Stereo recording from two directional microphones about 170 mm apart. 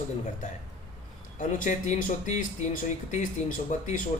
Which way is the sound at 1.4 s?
50° left (ahead or behind).